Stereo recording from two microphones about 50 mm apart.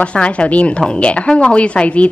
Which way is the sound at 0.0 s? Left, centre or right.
Left.